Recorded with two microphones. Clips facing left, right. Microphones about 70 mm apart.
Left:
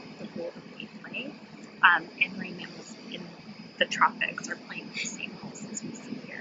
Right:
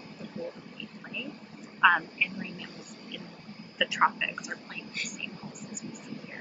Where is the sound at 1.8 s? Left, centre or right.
Left.